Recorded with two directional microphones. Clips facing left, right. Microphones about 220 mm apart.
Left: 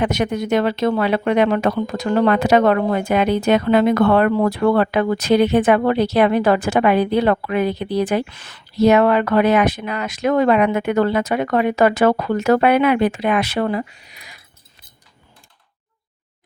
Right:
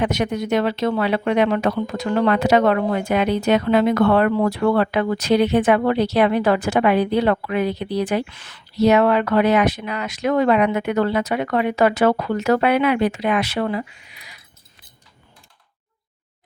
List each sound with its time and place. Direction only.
0.0 s speech: 50° left (ahead or behind)